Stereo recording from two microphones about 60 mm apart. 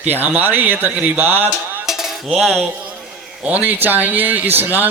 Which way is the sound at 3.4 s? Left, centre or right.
Right.